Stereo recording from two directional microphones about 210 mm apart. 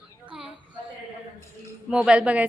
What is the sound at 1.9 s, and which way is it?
Speech, 5° right (ahead or behind).